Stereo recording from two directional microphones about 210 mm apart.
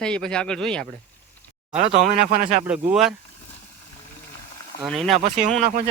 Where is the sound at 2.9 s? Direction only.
5° right (ahead or behind).